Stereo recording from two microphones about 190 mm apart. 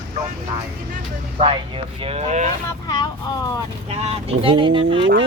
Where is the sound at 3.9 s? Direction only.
30° right (ahead or behind).